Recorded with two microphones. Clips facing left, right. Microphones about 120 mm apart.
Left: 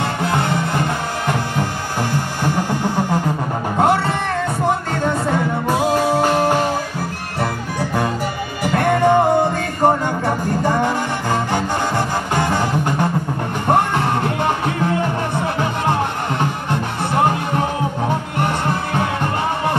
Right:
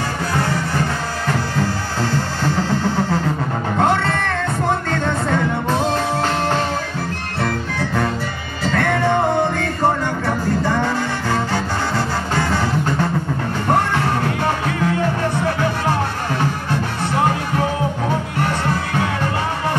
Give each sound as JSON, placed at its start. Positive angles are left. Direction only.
{"t": 0.2, "sound": "music", "side_deg": 20}